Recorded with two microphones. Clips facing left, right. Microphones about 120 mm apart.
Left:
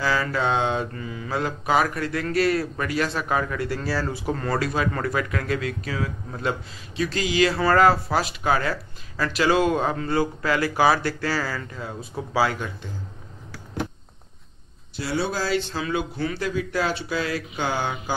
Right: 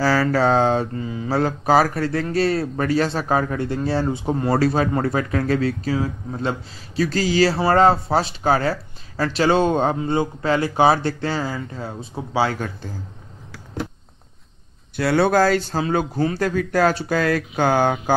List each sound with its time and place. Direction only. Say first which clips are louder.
0.0 s speech: right 6 dB; 40° right (ahead or behind)
12.5 s speech: right 4 dB; 45° right (ahead or behind)
15.0 s speech: right 9 dB; 60° right (ahead or behind)